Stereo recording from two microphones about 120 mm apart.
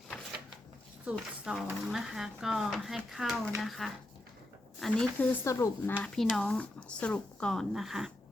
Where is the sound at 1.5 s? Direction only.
5° right (ahead or behind); by 5.9 s 25° left (ahead or behind).